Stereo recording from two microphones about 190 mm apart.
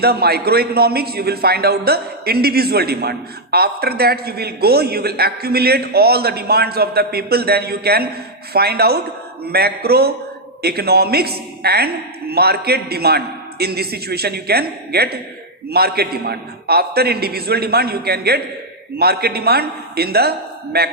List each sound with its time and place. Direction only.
0.0 s a man's voice: 55° right (ahead or behind)